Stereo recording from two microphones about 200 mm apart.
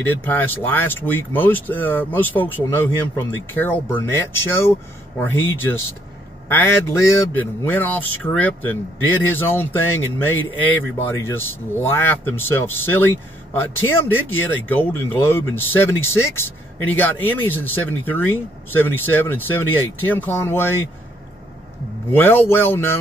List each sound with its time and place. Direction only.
0.0 s speech: 10° left (ahead or behind)
10.8 s speech: 10° left (ahead or behind)
22.1 s speech: 10° left (ahead or behind)